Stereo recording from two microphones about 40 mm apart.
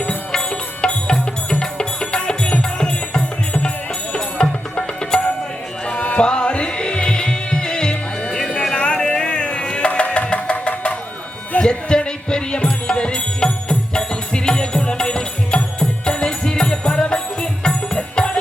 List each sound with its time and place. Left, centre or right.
0.3 s music: left
8.7 s a sound: left
9.6 s music: left
11.6 s music: left